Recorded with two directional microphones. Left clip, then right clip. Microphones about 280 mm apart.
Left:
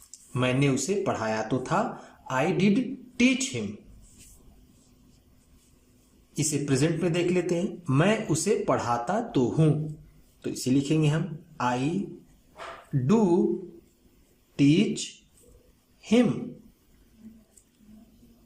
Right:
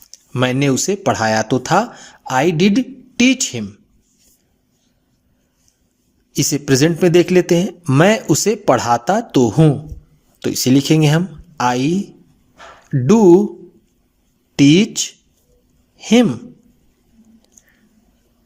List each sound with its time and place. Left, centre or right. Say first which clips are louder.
0.1 s speech: right 9 dB; right
6.3 s speech: right 11 dB; right
13.1 s speech: right 14 dB; right
14.6 s speech: right 11 dB; right